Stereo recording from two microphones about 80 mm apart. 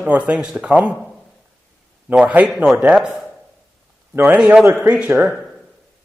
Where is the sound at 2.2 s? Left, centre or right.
Right.